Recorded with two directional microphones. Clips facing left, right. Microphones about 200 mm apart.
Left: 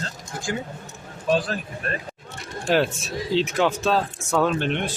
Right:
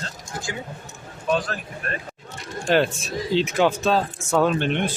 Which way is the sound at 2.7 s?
5° left (ahead or behind).